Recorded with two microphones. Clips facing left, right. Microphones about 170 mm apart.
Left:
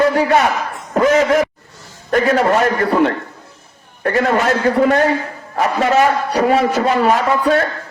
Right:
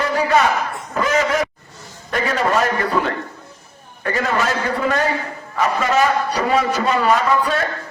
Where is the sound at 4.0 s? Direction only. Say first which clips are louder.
Left 5 dB; 60° left (ahead or behind).